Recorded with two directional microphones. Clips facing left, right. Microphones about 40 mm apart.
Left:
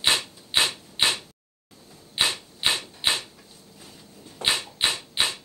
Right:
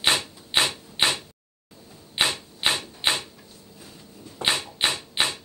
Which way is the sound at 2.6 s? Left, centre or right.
Centre.